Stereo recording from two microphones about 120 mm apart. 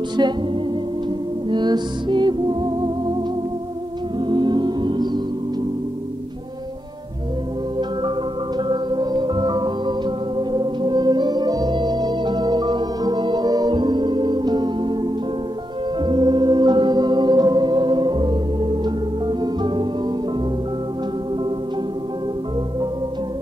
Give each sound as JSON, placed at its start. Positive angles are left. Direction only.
{"t": 0.2, "sound": "music", "side_deg": -35}
{"t": 1.5, "sound": "music", "side_deg": -40}
{"t": 4.2, "sound": "music", "side_deg": -40}
{"t": 8.5, "sound": "music", "side_deg": -40}
{"t": 16.0, "sound": "music", "side_deg": -40}